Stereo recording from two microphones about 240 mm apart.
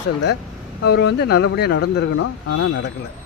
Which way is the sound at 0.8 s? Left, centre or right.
Left.